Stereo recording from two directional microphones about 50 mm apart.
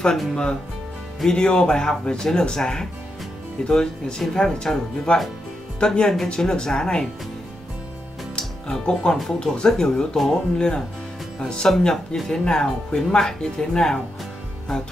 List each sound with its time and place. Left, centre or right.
0.3 s speech: centre
8.4 s speech: centre